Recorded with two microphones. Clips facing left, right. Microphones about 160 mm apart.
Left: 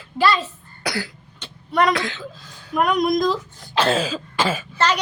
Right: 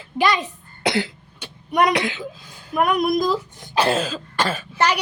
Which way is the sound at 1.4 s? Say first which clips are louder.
Right 1 dB; 15° right (ahead or behind).